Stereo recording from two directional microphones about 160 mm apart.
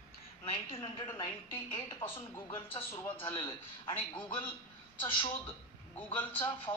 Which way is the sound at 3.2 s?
30° left (ahead or behind).